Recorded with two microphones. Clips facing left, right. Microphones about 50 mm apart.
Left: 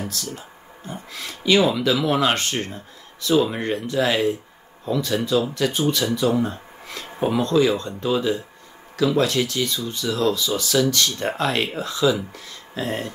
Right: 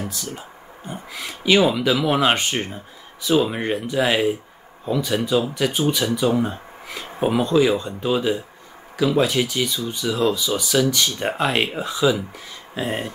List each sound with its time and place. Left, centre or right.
0.0 s speech: centre